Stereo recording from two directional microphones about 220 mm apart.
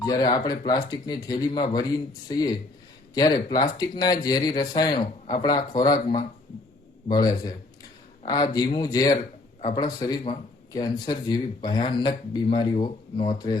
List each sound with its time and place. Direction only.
0.0 s speech: 20° left (ahead or behind)